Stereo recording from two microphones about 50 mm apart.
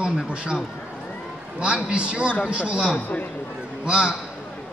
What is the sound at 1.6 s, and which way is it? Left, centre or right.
A man's voice, right.